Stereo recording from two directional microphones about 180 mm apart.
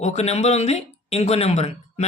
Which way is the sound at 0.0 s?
40° left (ahead or behind).